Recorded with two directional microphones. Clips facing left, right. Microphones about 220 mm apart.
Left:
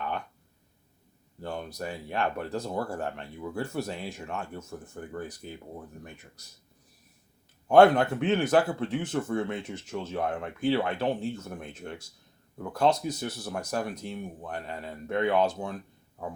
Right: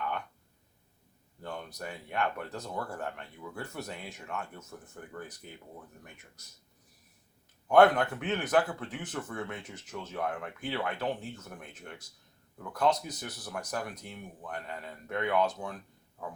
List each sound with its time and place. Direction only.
1.4 s speech: 30° left (ahead or behind)
7.7 s speech: 30° left (ahead or behind)